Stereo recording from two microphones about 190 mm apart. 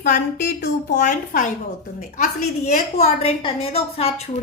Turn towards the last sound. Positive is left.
turn(degrees=30)  # may be behind; listen again after turning